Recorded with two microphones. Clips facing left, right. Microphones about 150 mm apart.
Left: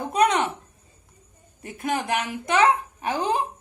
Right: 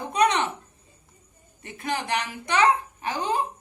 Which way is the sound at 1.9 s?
Centre (ahead or behind).